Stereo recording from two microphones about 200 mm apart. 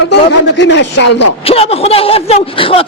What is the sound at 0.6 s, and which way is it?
Speech, 65° left (ahead or behind).